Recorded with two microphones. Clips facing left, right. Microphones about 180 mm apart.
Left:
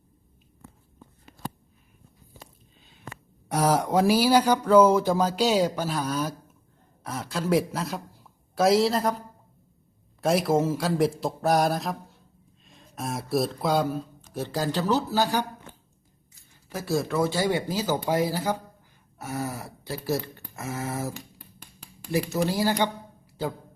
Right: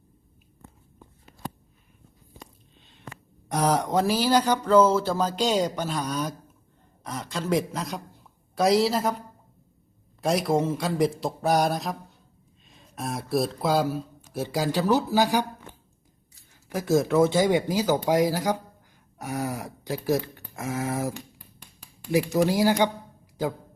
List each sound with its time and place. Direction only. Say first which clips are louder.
3.5 s a woman's voice: left 1 dB; 10° left (ahead or behind)
10.2 s a man's voice: left 1 dB; centre (ahead or behind)
16.6 s speech: right 4 dB; 15° right (ahead or behind)
22.1 s speech: right 3 dB; 15° right (ahead or behind)